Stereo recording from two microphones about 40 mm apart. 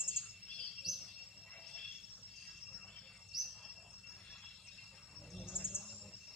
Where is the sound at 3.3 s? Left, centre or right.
Centre.